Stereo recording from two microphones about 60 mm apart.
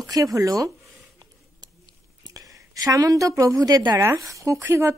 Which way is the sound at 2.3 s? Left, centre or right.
Right.